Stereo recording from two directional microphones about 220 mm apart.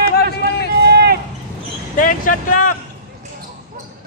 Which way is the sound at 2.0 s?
35° left (ahead or behind).